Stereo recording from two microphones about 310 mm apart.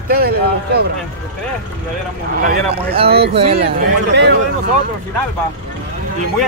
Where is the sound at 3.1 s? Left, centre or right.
Right.